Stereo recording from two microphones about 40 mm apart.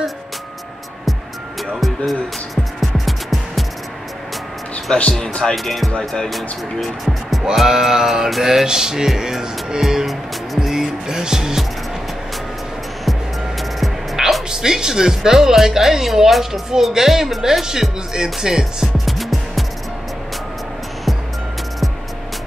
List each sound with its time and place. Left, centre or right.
1.8 s music: centre
4.9 s speech: centre
5.5 s speech: centre
5.9 s speech: centre
6.3 s speech: centre
7.5 s music: centre
13.6 s music: centre
14.5 s music: centre
19.1 s music: centre